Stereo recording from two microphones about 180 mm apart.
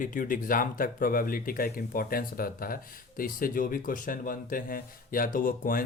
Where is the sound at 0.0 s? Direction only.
50° left (ahead or behind).